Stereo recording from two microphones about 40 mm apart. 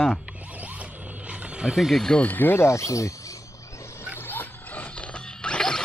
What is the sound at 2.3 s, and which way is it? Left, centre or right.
Speech, left.